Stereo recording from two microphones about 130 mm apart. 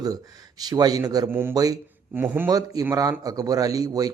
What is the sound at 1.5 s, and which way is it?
Speech, 30° right (ahead or behind).